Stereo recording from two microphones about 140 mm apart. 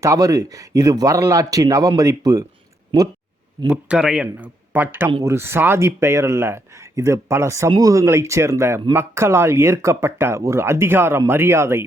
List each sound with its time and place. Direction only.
0.0 s speech: 25° right (ahead or behind)
3.7 s speech: 5° right (ahead or behind)